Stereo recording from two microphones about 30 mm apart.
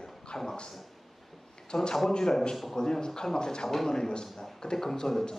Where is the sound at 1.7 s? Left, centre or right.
Left.